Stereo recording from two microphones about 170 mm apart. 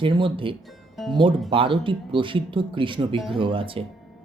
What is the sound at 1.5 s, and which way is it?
Speech, 30° right (ahead or behind).